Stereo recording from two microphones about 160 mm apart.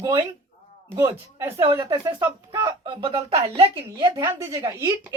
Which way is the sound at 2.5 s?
30° right (ahead or behind).